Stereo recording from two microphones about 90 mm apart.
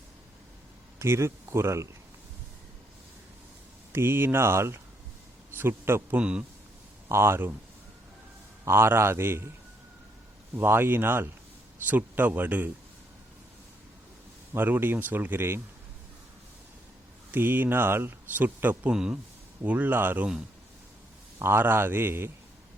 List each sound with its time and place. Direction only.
0.9 s speech: 30° right (ahead or behind)
3.9 s speech: 25° right (ahead or behind)
6.1 s a man's voice: 10° right (ahead or behind)
7.1 s speech: 30° right (ahead or behind)
8.6 s speech: 25° right (ahead or behind)
10.5 s speech: 25° right (ahead or behind)
14.5 s speech: 20° right (ahead or behind)
17.3 s speech: 25° right (ahead or behind)
18.9 s a man's voice: 10° right (ahead or behind)
19.6 s speech: 20° right (ahead or behind)
21.3 s speech: 25° right (ahead or behind)